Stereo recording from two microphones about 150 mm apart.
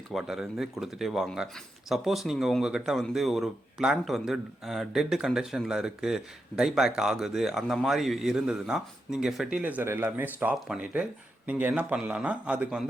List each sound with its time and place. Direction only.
0.1 s a man's voice: centre (ahead or behind)